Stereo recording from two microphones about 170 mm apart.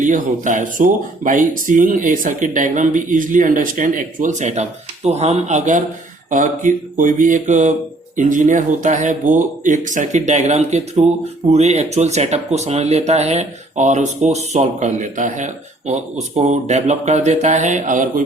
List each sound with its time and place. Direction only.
0.0 s speech: 45° right (ahead or behind)